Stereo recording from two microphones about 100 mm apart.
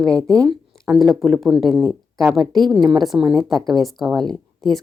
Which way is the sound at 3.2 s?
45° right (ahead or behind).